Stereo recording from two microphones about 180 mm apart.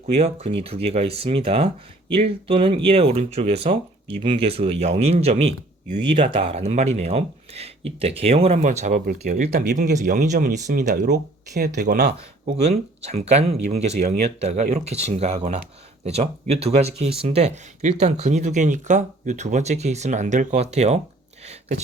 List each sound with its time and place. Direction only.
0.1 s speech: 35° right (ahead or behind)
9.5 s speech: 60° right (ahead or behind)
9.7 s speech: 45° right (ahead or behind)
11.1 s speech: 65° right (ahead or behind)
12.5 s speech: 35° right (ahead or behind)